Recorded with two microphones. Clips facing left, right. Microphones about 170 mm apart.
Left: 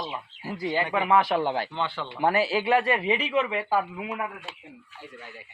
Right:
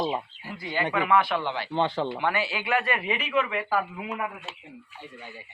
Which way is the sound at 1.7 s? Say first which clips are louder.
Right 6 dB; 40° right (ahead or behind).